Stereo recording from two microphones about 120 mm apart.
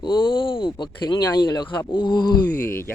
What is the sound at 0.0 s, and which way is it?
Speech, 40° left (ahead or behind).